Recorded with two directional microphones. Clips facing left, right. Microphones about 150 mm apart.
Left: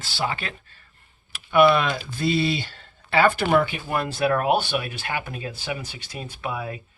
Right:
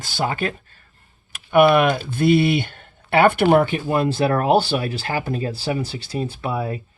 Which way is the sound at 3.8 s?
25° right (ahead or behind).